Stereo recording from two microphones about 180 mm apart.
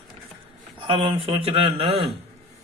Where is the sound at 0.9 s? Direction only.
30° right (ahead or behind).